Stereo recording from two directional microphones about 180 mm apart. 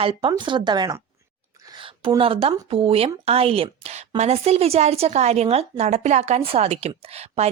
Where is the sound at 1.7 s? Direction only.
30° right (ahead or behind).